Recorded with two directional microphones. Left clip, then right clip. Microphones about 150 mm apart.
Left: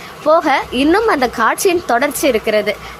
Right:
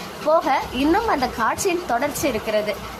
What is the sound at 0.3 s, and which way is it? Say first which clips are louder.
A woman's voice: left 6 dB; 30° left (ahead or behind).